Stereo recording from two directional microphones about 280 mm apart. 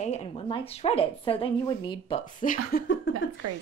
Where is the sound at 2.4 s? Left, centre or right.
Left.